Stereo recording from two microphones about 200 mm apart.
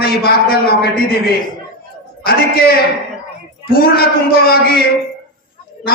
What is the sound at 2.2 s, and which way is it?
A man's voice, 50° left (ahead or behind).